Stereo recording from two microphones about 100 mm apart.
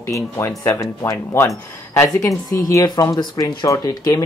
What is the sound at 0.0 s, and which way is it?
Speech, 30° left (ahead or behind).